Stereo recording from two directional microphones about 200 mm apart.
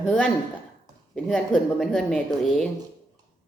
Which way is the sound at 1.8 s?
Centre (ahead or behind).